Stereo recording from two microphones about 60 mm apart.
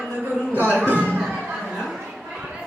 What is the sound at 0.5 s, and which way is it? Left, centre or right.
Music, right.